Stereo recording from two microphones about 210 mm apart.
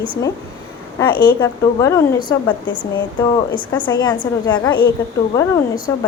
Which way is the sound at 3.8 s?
20° left (ahead or behind).